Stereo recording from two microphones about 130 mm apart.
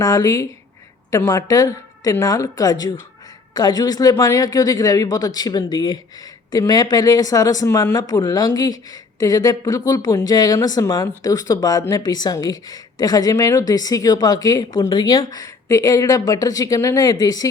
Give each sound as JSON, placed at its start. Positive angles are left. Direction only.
{"t": 0.0, "sound": "speech", "side_deg": 25}